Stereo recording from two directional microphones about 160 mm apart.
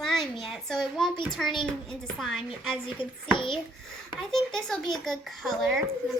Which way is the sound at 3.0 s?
35° left (ahead or behind).